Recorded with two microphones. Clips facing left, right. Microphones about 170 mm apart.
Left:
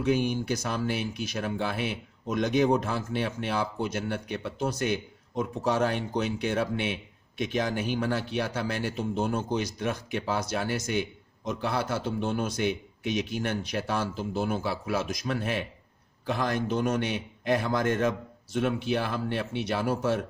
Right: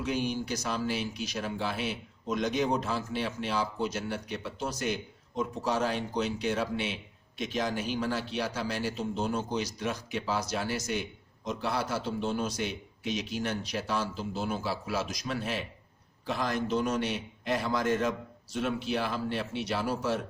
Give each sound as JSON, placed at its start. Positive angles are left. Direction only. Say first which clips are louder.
{"t": 0.0, "sound": "speech", "louder": "left 5 dB", "side_deg": 55}